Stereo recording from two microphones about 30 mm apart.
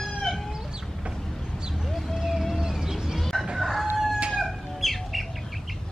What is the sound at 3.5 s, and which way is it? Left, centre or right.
Crowing, centre.